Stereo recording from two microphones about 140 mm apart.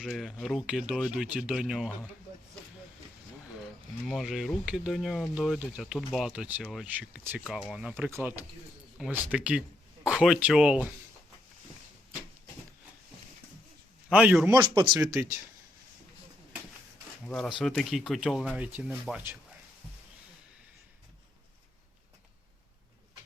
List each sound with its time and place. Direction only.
0.0 s speech: centre (ahead or behind)
4.0 s speech: 5° right (ahead or behind)
14.1 s speech: 10° right (ahead or behind)
14.5 s speech: 25° right (ahead or behind)
17.2 s speech: 5° left (ahead or behind)